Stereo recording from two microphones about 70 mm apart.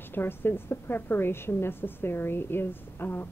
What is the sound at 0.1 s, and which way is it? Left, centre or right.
A woman's voice, left.